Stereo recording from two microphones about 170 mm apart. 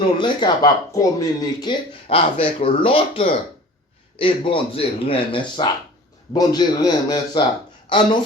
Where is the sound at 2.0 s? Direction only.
35° left (ahead or behind).